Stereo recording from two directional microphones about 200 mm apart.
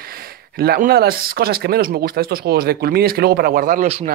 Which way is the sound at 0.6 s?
50° right (ahead or behind).